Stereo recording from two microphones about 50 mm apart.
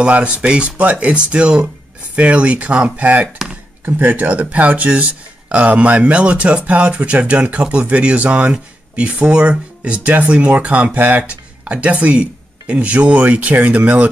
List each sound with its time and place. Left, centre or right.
0.0 s speech: right
3.8 s speech: right